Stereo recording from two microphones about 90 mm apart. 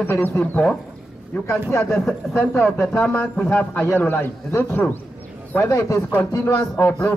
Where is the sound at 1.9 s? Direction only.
5° left (ahead or behind).